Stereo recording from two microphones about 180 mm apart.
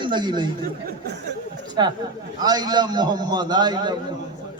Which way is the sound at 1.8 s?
25° right (ahead or behind).